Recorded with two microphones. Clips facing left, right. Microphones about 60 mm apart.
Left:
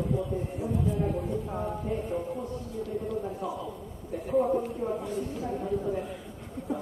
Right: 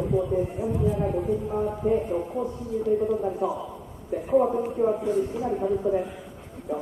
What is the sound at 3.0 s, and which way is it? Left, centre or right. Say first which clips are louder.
Speech: right 8 dB; right.